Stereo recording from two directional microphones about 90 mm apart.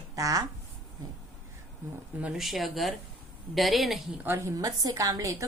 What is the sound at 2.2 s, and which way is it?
Speech, 5° right (ahead or behind).